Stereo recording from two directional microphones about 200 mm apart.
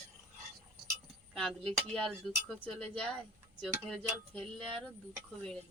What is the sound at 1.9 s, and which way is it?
Speech, 5° left (ahead or behind).